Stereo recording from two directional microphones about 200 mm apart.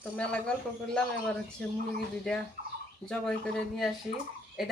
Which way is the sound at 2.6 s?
40° right (ahead or behind).